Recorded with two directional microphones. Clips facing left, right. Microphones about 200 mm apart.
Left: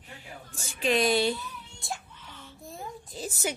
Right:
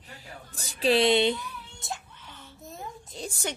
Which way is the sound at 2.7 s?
Centre (ahead or behind).